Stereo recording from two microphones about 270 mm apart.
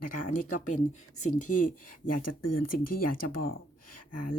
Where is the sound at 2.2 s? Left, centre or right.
Left.